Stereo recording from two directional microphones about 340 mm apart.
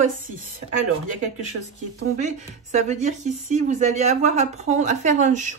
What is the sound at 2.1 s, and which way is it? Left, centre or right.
Speech, right.